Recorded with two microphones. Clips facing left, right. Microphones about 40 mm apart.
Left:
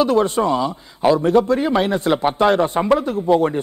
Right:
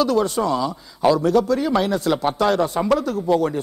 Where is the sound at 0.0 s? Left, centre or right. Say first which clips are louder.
Left 3 dB; left.